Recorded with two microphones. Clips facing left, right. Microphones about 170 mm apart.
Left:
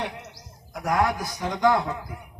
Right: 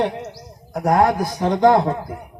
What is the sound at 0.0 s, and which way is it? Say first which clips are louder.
Bird: right 11 dB; 40° right (ahead or behind).